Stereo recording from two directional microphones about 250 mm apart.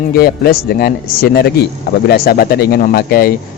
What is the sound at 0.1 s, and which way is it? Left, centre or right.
Speech, left.